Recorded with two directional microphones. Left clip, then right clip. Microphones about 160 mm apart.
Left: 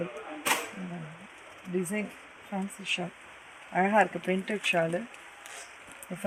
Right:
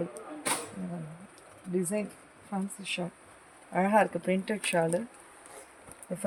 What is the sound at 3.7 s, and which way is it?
Speech, 45° right (ahead or behind).